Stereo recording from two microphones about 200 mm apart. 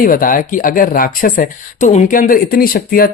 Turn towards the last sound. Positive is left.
turn(degrees=45)  # may be behind; listen again after turning